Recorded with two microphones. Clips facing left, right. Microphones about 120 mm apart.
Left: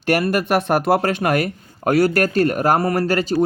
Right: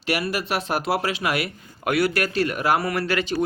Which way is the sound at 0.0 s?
50° left (ahead or behind).